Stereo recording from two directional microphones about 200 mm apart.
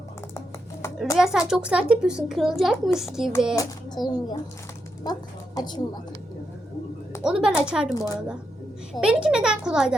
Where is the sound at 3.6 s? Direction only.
20° left (ahead or behind).